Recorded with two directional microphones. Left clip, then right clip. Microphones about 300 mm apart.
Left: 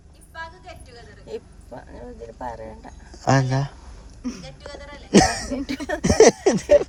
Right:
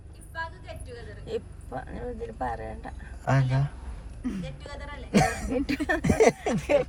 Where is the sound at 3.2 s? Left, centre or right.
Left.